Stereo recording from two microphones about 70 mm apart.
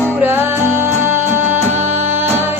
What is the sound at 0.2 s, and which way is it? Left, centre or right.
Music, right.